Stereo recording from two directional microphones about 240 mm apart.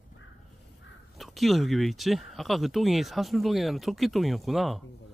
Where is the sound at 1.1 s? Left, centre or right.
Centre.